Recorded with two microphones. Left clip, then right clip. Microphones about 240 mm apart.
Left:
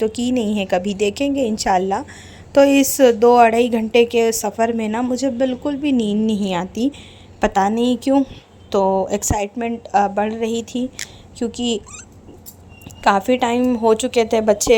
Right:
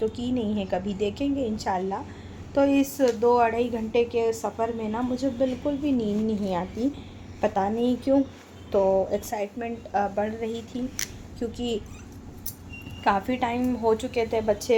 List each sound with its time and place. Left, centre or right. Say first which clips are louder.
0.0 s a woman's voice: left 8 dB; left
13.0 s a woman's voice: left 9 dB; left